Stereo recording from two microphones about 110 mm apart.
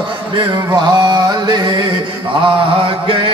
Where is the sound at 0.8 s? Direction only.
40° right (ahead or behind).